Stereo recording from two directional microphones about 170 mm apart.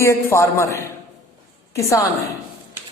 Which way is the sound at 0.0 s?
15° left (ahead or behind).